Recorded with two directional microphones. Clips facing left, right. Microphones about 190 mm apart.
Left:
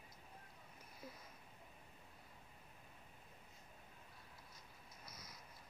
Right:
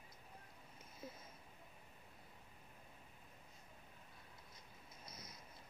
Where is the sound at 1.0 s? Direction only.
25° right (ahead or behind).